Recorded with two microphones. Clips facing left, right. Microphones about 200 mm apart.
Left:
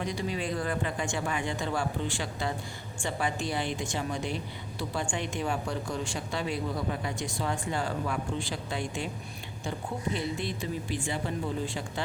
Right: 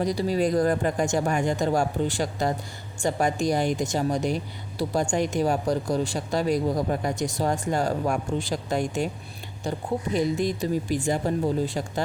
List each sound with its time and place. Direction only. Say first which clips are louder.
0.0 s speech: right 9 dB; 35° right (ahead or behind)